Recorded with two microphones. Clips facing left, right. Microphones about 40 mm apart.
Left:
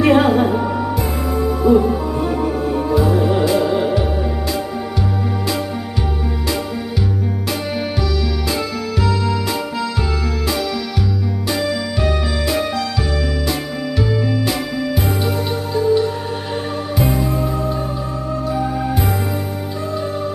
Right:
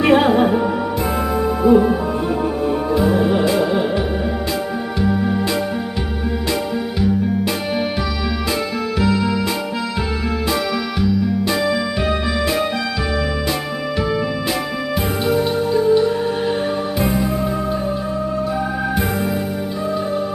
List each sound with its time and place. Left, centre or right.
0.0 s music: centre
1.6 s music: right
3.4 s music: right
9.0 s music: centre
11.9 s music: right
17.0 s music: right